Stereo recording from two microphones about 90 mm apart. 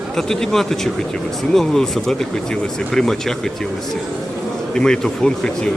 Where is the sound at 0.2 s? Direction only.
5° left (ahead or behind).